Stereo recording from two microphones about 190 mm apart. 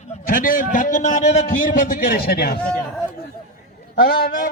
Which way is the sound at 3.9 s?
50° left (ahead or behind).